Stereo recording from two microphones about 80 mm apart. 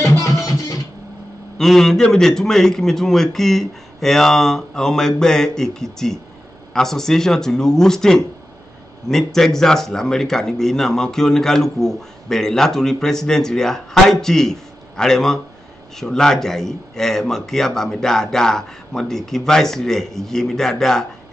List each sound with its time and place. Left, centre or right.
0.5 s music: left
1.6 s a man's voice: centre